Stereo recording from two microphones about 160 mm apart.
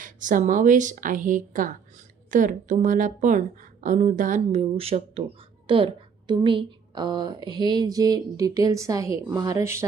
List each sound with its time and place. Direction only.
0.0 s a woman's voice: 55° right (ahead or behind)
4.6 s a woman's voice: 40° right (ahead or behind); by 9.8 s 20° right (ahead or behind)